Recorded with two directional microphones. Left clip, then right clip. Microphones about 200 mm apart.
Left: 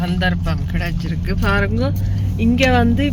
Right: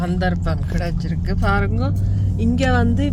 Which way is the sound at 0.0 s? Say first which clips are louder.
Left 2 dB; 5° right (ahead or behind).